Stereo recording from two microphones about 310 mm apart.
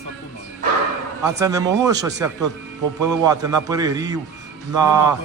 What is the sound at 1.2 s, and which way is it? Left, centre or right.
Speech, centre.